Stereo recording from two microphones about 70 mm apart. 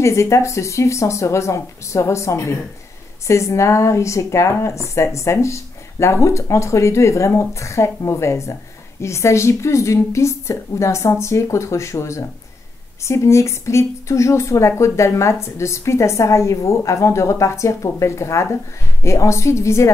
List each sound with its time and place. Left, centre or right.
0.0 s a woman's voice: left